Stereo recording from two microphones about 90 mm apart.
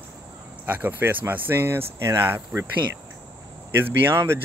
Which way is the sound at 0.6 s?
20° right (ahead or behind).